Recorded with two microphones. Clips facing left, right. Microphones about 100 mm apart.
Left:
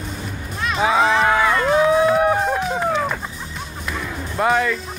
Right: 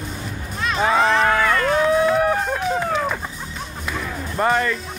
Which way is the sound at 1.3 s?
15° left (ahead or behind).